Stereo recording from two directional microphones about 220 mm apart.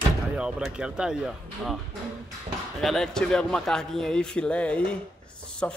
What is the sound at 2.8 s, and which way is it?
A man's voice, centre (ahead or behind).